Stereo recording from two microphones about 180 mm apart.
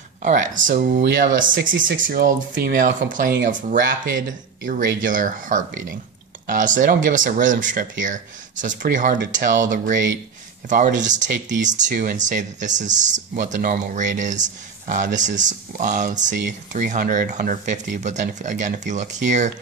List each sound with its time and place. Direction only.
0.2 s speech: 45° right (ahead or behind)
1.5 s speech: 90° right
2.0 s speech: 50° right (ahead or behind)